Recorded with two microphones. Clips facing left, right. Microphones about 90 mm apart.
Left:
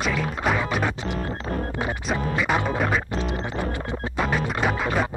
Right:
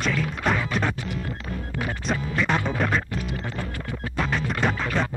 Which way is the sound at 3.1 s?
20° left (ahead or behind).